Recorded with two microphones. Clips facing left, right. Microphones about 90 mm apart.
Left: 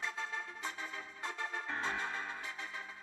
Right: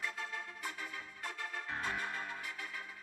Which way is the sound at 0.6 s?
20° left (ahead or behind).